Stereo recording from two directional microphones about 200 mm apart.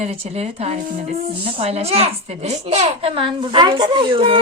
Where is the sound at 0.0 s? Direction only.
30° right (ahead or behind).